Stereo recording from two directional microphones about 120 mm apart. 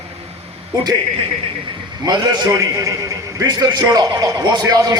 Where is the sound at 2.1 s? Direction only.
35° right (ahead or behind).